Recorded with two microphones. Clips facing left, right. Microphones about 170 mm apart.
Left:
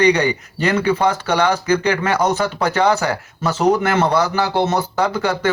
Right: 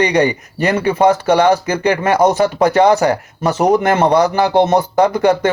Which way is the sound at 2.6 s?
35° right (ahead or behind).